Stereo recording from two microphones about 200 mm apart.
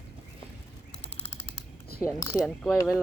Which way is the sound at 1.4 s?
55° right (ahead or behind).